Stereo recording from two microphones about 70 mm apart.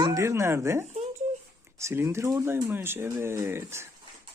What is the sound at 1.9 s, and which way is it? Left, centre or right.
Speech, right.